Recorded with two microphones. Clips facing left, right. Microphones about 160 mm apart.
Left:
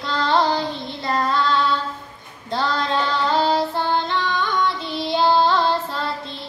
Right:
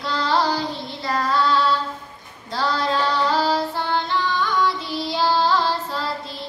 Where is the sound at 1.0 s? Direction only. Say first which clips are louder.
Even; 25° left (ahead or behind).